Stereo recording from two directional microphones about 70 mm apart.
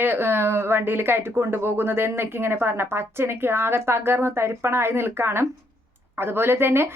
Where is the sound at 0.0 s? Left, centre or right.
Right.